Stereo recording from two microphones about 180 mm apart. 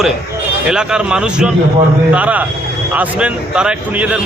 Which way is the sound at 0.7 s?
5° right (ahead or behind).